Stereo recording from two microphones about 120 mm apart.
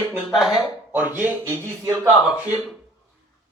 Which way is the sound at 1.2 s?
20° right (ahead or behind).